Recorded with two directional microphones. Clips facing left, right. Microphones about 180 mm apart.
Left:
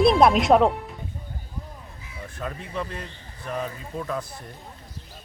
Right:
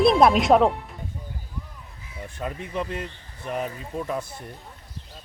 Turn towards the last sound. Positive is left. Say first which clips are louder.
# right 1 dB
turn(degrees=-15)  # may be behind; listen again after turning